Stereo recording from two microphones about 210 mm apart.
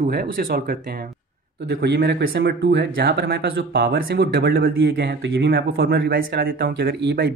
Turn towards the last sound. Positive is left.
turn(degrees=-50)  # may be behind; listen again after turning